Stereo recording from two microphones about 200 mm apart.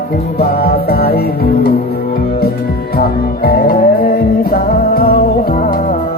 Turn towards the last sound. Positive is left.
turn(degrees=50)  # may be behind; listen again after turning